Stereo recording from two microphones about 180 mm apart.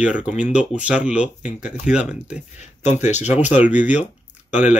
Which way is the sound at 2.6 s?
40° left (ahead or behind).